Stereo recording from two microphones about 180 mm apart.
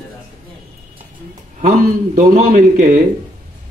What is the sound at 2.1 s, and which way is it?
Speech, 45° right (ahead or behind).